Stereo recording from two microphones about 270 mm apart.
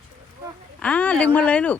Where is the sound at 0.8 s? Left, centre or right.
Centre.